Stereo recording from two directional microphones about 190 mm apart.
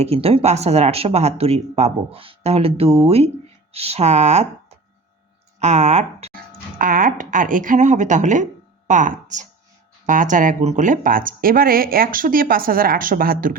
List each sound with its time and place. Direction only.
0.0 s speech: 30° right (ahead or behind)
6.7 s speech: 45° right (ahead or behind)